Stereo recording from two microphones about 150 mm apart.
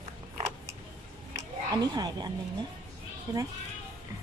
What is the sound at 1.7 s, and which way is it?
Speech, 25° right (ahead or behind).